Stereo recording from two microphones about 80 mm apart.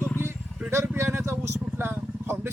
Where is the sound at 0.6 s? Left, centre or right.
Right.